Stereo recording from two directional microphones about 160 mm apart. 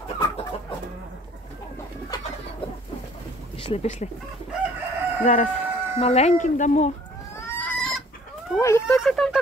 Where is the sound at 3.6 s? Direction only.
40° left (ahead or behind).